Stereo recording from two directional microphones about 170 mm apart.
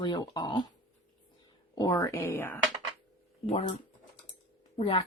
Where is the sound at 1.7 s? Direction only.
25° left (ahead or behind).